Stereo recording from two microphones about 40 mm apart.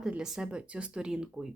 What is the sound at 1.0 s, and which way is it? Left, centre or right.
Speech, centre.